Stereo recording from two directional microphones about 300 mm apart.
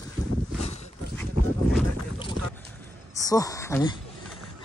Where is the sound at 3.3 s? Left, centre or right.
Centre.